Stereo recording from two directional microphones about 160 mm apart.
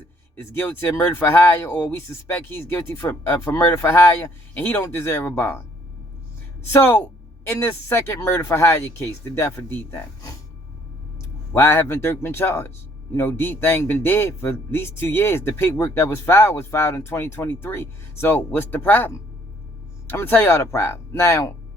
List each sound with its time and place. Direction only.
0.3 s speech: 15° left (ahead or behind)
6.7 s speech: 15° left (ahead or behind)
11.5 s speech: 15° left (ahead or behind)